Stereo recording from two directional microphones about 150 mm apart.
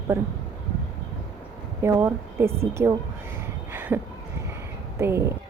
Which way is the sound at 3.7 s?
15° right (ahead or behind).